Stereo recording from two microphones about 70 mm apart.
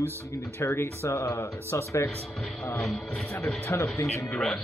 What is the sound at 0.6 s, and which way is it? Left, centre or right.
Speech, left.